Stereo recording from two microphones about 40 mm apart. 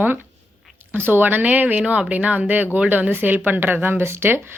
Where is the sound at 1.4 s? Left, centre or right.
Right.